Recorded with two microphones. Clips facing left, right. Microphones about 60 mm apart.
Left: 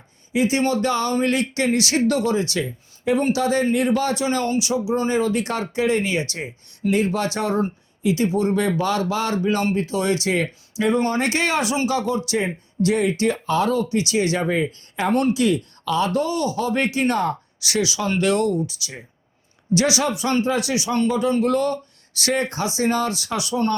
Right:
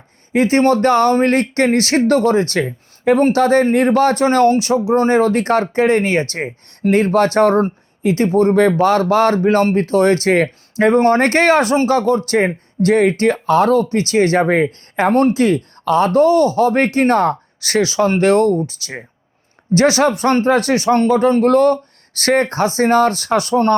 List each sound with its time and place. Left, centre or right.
0.3 s speech: right